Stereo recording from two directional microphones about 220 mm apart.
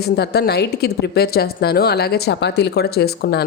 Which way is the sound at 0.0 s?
45° left (ahead or behind).